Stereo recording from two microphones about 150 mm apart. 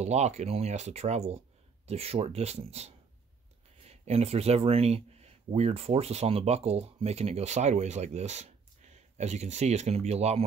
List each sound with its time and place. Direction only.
0.0 s speech: 45° right (ahead or behind)